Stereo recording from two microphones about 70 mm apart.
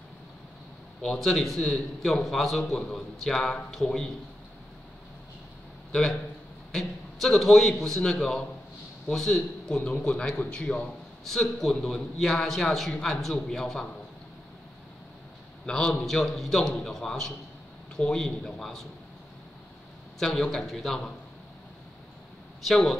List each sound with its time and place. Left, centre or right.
1.0 s a man's voice: centre
5.9 s a man's voice: centre
11.2 s a man's voice: centre
15.6 s a man's voice: centre
20.2 s a man's voice: centre
22.7 s a man's voice: centre